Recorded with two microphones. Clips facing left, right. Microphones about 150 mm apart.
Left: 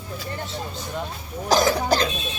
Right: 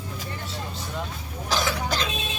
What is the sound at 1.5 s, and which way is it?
Cough, 40° left (ahead or behind).